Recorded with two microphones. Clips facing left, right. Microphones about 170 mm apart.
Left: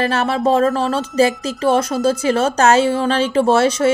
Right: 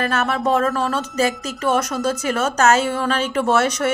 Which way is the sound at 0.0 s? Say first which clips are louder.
Left 3 dB; 30° left (ahead or behind).